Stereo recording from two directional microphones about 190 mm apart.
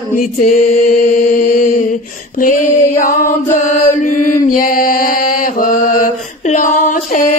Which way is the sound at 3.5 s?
40° left (ahead or behind).